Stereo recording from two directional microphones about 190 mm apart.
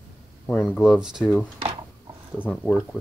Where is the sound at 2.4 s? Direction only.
25° right (ahead or behind).